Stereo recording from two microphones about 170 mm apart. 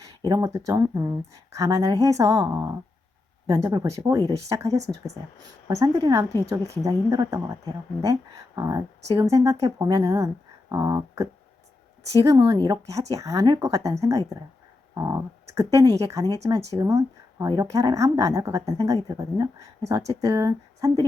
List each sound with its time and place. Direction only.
0.0 s a woman's voice: 20° right (ahead or behind)